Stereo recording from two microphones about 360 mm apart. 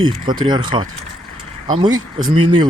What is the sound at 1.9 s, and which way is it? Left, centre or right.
Speech, right.